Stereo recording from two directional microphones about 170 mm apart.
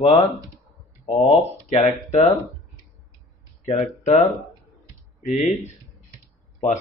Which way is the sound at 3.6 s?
35° left (ahead or behind).